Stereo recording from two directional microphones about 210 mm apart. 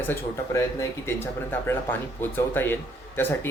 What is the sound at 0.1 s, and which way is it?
Speech, 10° left (ahead or behind).